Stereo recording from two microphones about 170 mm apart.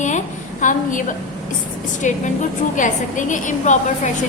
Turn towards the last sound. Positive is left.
turn(degrees=45)  # may be behind; listen again after turning